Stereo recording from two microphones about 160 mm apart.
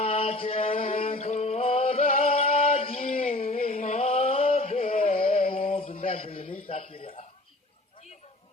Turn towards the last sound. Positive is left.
turn(degrees=35)  # may be behind; listen again after turning